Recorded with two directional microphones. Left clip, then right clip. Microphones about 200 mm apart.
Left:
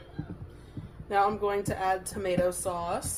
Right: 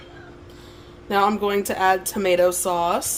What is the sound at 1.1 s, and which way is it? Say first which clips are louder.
Speech: right 6 dB; 40° right (ahead or behind).